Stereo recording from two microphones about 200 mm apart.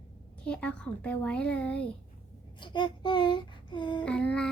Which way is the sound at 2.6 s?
25° left (ahead or behind).